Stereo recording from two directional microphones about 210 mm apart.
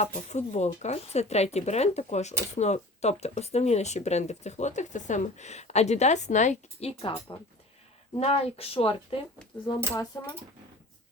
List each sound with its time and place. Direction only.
0.0 s speech: 35° left (ahead or behind)
10.1 s speech: 20° left (ahead or behind)